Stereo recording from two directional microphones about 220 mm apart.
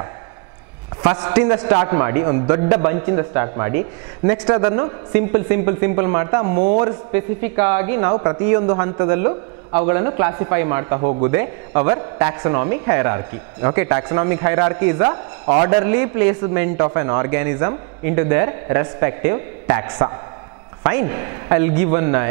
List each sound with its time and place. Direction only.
1.2 s a man's voice: 10° right (ahead or behind)
11.0 s speech: 35° right (ahead or behind)
11.2 s a man's voice: 15° right (ahead or behind)